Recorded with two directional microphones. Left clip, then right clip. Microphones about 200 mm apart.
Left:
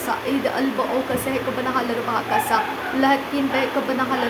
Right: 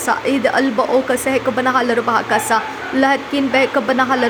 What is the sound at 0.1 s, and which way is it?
A woman's voice, 35° right (ahead or behind).